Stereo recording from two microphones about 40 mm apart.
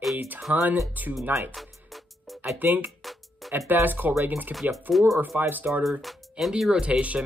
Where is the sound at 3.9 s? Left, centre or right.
Right.